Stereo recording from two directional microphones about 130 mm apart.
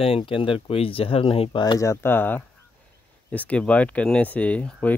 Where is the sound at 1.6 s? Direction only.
25° left (ahead or behind).